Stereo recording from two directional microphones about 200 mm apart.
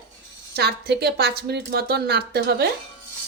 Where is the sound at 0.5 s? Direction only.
55° right (ahead or behind).